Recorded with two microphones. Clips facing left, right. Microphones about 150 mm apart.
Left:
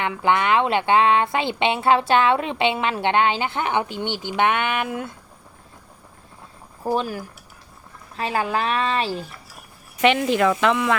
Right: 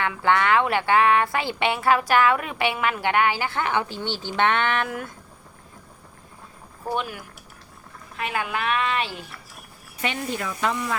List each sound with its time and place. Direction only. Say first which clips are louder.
0.0 s speech: left 1 dB; 20° left (ahead or behind)
6.8 s speech: left 5 dB; 35° left (ahead or behind)
10.0 s speech: left 10 dB; 90° left